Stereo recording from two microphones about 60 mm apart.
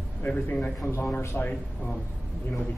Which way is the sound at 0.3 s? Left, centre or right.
Left.